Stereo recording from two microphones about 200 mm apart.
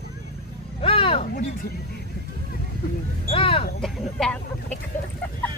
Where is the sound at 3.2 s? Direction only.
30° left (ahead or behind).